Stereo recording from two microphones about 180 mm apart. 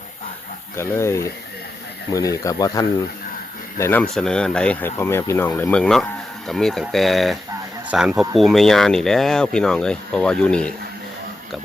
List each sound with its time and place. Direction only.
0.8 s speech: 15° left (ahead or behind)